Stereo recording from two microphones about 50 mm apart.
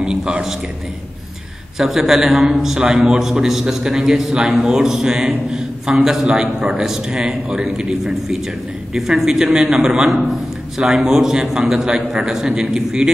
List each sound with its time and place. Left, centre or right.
0.0 s a man's voice: centre
1.8 s a man's voice: centre
7.4 s speech: right
7.7 s a man's voice: centre